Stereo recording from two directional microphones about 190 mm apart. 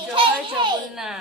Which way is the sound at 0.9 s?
Centre (ahead or behind).